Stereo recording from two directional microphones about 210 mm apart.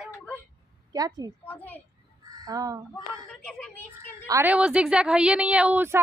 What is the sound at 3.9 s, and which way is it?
A woman's voice, 10° right (ahead or behind).